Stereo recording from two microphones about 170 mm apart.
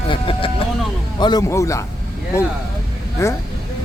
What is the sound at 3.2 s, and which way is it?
Speech, 15° left (ahead or behind).